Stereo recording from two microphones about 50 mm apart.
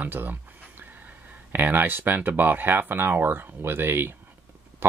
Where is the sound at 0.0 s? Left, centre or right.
Right.